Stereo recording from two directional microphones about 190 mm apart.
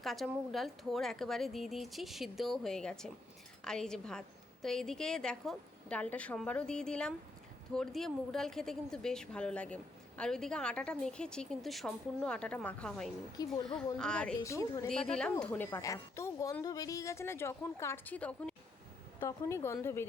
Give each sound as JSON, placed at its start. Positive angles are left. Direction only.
{"t": 0.0, "sound": "a woman's voice", "side_deg": 0}
{"t": 14.4, "sound": "a woman's voice", "side_deg": 15}
{"t": 15.1, "sound": "a woman's voice", "side_deg": 5}